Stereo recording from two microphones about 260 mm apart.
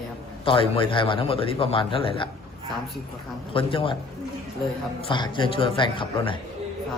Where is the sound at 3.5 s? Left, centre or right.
Left.